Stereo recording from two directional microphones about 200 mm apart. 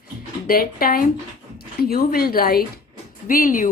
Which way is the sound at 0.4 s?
45° left (ahead or behind).